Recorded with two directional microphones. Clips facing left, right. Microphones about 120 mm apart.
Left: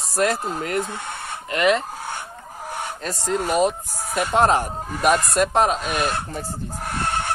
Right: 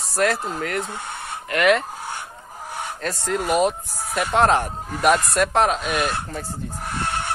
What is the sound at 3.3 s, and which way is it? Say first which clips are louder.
Speech: even; 5° right (ahead or behind).